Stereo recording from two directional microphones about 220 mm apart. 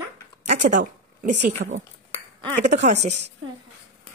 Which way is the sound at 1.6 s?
45° right (ahead or behind).